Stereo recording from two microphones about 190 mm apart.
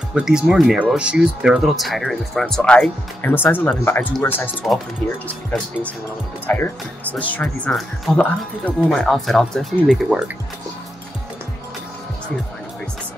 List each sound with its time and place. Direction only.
0.1 s speech: 5° right (ahead or behind)
4.6 s speech: centre (ahead or behind)
6.4 s speech: 10° left (ahead or behind)